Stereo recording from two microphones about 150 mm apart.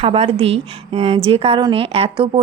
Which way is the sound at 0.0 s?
40° right (ahead or behind).